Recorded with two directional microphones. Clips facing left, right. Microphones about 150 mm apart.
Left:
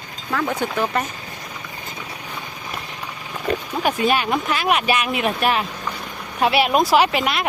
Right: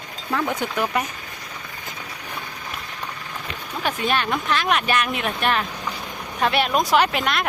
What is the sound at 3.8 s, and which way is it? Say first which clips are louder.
Speech: left 3 dB; 10° left (ahead or behind).